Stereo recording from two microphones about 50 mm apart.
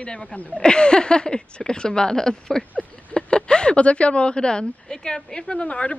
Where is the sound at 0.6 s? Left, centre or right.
Centre.